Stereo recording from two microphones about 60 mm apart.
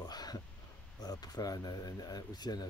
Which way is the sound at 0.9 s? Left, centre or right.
Left.